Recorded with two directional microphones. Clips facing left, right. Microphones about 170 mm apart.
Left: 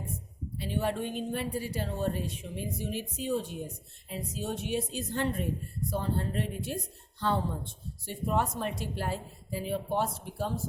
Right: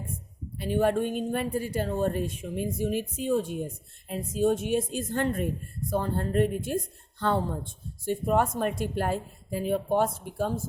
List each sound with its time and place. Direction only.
0.5 s a woman's voice: 50° right (ahead or behind)